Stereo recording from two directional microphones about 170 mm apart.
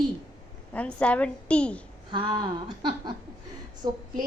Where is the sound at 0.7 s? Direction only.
5° left (ahead or behind).